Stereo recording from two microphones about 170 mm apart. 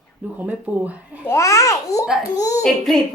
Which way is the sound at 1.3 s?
20° left (ahead or behind).